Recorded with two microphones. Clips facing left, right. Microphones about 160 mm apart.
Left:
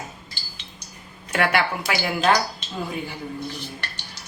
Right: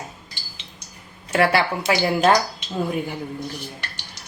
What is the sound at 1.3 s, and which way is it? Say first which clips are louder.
Speech: right 3 dB; 25° right (ahead or behind).